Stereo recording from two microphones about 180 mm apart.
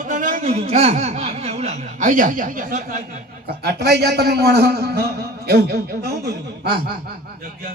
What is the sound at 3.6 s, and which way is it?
A man's voice, 65° right (ahead or behind).